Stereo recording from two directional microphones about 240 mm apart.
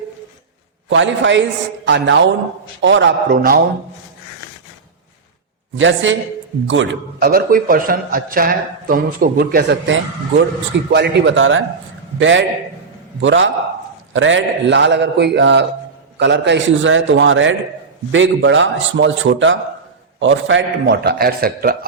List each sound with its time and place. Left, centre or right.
0.9 s a man's voice: right
5.7 s a man's voice: right